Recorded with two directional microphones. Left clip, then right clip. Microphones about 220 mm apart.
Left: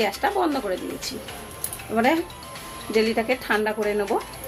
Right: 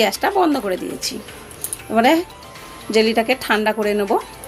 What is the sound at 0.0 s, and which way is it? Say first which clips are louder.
Speech: right 6 dB; 50° right (ahead or behind).